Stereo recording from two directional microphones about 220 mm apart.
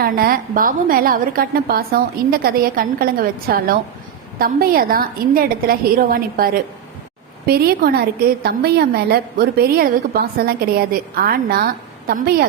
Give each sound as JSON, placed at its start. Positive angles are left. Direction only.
{"t": 0.0, "sound": "a woman's voice", "side_deg": -40}